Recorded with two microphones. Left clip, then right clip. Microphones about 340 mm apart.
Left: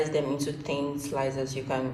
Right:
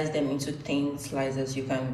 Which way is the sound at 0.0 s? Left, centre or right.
Centre.